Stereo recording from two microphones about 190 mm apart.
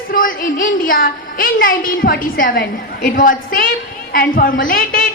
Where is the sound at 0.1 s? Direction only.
50° left (ahead or behind).